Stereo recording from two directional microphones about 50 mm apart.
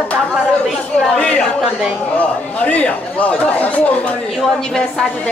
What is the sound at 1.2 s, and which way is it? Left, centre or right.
Speech, left.